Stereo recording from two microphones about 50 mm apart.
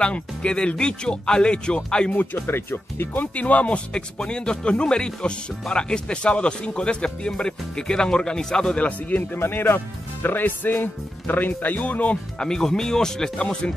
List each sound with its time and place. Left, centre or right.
0.0 s speech: left
2.1 s speech: left
3.3 s speech: left
8.8 s speech: left
9.4 s speech: left
12.4 s speech: centre